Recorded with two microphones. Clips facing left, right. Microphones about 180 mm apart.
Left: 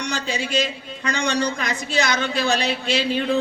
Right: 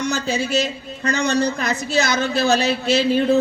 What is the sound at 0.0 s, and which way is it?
A man's voice, 45° right (ahead or behind).